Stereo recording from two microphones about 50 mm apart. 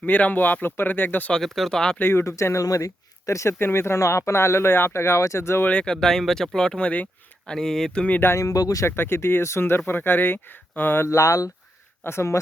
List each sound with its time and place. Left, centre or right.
0.0 s speech: left
1.3 s speech: centre
2.0 s speech: left
2.2 s speech: left
3.6 s speech: left
5.8 s speech: centre
7.9 s speech: left
8.9 s speech: left
11.0 s speech: left
12.0 s speech: left